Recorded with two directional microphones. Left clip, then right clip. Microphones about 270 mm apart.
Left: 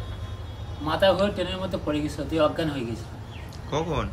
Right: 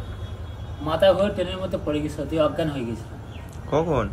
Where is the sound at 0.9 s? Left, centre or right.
Centre.